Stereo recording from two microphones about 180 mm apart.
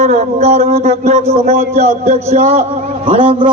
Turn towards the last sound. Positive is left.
turn(degrees=-30)  # may be behind; listen again after turning